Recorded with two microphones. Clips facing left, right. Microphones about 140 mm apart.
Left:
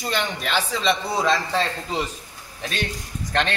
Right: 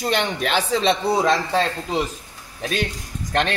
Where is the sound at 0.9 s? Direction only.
20° right (ahead or behind).